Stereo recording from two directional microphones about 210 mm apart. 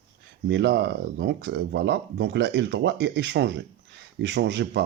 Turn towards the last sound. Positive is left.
turn(degrees=-55)  # may be behind; listen again after turning